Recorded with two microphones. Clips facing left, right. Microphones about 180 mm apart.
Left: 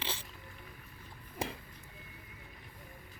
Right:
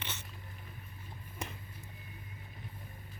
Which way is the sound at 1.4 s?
30° left (ahead or behind).